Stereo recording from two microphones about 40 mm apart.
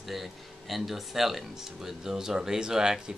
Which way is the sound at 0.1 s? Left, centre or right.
Centre.